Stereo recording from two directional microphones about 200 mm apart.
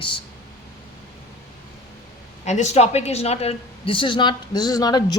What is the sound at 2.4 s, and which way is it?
A woman's voice, 35° left (ahead or behind).